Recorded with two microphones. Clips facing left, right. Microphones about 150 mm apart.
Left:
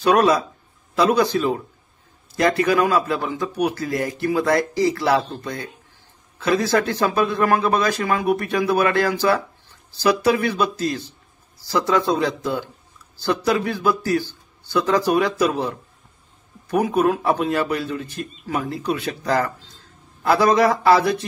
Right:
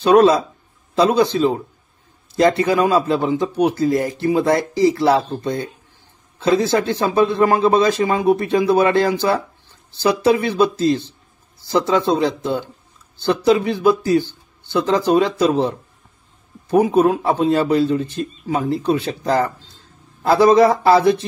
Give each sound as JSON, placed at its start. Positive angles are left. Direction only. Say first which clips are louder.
{"t": 0.0, "sound": "speech", "louder": "right 4 dB", "side_deg": -25}